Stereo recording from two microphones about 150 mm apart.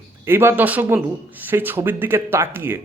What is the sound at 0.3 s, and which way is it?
Speech, 15° right (ahead or behind).